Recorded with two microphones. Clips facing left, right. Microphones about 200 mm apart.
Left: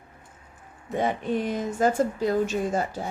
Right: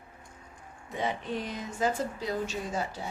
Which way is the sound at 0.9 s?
50° left (ahead or behind).